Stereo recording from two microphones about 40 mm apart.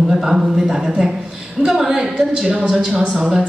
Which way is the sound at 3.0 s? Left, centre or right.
Right.